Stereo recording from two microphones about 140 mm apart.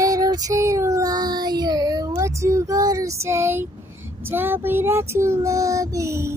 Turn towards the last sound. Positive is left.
turn(degrees=-20)  # may be behind; listen again after turning